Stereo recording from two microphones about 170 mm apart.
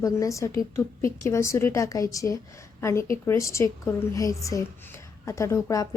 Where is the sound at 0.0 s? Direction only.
20° left (ahead or behind).